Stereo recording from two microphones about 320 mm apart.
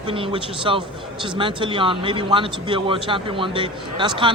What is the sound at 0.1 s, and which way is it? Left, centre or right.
A man's voice, centre.